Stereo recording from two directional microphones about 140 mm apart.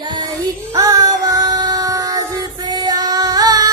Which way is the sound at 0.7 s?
25° right (ahead or behind).